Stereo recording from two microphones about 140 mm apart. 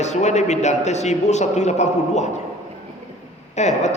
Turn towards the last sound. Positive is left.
turn(degrees=55)  # may be behind; listen again after turning